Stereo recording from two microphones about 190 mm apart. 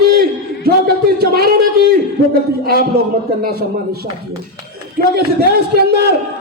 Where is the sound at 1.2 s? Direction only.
55° right (ahead or behind).